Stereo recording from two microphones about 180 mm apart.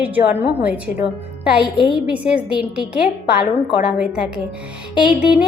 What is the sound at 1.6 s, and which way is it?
Speech, 25° left (ahead or behind).